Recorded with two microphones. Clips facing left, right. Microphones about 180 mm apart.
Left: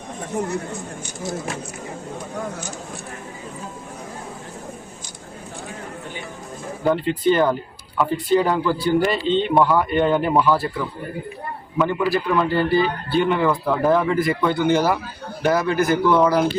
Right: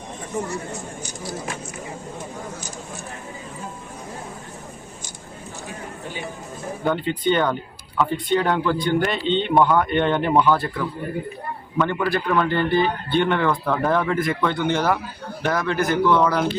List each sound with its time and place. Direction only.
0.4 s speech: 60° left (ahead or behind)
6.8 s a man's voice: centre (ahead or behind)
11.8 s a man's voice: 5° left (ahead or behind)